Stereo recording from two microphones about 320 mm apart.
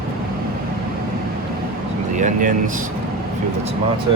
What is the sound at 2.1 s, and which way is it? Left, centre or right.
Speech, right.